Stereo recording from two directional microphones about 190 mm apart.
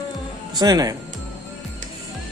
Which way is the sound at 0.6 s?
20° right (ahead or behind).